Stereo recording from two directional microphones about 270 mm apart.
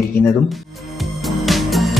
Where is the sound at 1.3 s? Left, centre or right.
Centre.